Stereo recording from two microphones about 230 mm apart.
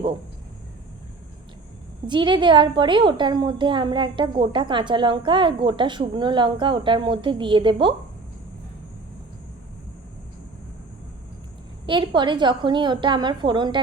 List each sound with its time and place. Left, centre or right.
2.0 s a woman's voice: centre
11.9 s a woman's voice: right